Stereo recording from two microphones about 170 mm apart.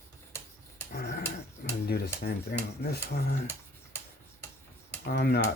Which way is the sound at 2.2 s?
70° left (ahead or behind).